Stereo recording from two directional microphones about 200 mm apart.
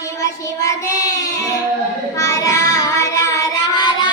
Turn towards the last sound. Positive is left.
turn(degrees=20)  # may be behind; listen again after turning